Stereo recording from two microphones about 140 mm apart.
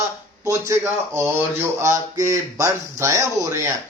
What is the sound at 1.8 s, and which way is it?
Speech, 25° right (ahead or behind).